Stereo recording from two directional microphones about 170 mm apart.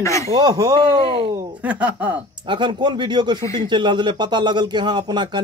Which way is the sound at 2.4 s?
30° right (ahead or behind).